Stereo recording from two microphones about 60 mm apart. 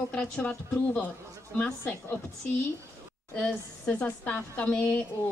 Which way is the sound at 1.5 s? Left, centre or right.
Left.